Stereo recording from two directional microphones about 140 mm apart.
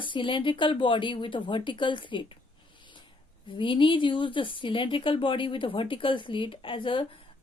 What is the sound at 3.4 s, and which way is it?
Speech, 35° left (ahead or behind).